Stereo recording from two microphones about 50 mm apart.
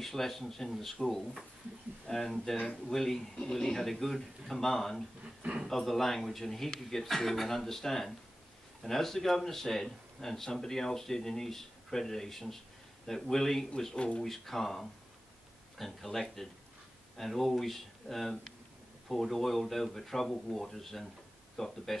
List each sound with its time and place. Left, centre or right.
0.0 s speech: centre
5.4 s a man's voice: right
5.7 s a man's voice: centre
13.9 s speech: left
14.2 s a man's voice: centre